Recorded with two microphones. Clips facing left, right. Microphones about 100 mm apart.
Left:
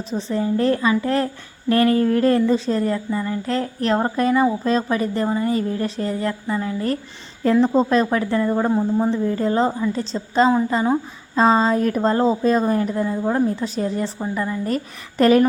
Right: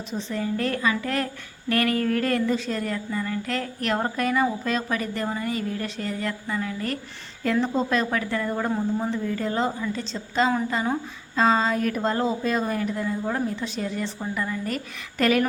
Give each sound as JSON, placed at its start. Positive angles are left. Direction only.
{"t": 0.1, "sound": "speech", "side_deg": 35}